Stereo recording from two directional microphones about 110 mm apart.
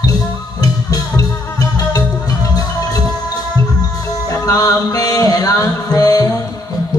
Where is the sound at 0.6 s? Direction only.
35° left (ahead or behind).